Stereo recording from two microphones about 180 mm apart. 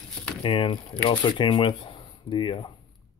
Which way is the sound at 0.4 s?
30° left (ahead or behind).